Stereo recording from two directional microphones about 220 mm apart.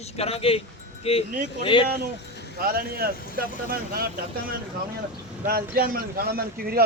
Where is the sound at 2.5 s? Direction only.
45° right (ahead or behind).